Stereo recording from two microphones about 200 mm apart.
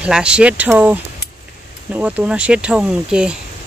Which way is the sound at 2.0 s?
5° right (ahead or behind).